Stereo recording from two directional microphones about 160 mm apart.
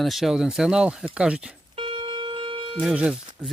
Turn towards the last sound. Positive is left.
turn(degrees=-5)  # may be behind; listen again after turning